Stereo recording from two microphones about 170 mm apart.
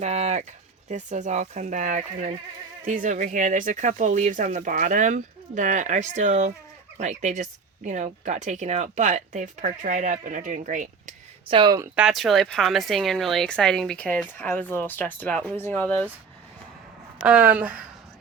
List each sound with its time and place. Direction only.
0.0 s speech: 40° right (ahead or behind)
11.4 s speech: 30° right (ahead or behind)
11.9 s speech: centre (ahead or behind)
17.2 s speech: 10° right (ahead or behind)